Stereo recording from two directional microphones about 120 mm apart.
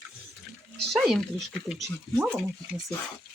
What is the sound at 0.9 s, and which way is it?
Speech, centre (ahead or behind).